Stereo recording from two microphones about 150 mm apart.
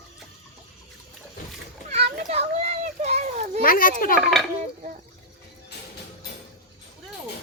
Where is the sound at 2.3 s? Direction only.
45° right (ahead or behind).